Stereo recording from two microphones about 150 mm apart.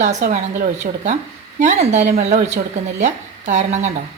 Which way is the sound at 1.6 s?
50° right (ahead or behind).